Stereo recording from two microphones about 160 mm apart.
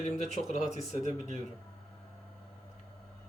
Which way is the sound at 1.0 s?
50° right (ahead or behind).